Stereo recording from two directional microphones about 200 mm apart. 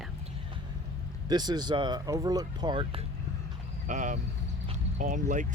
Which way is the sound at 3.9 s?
40° right (ahead or behind).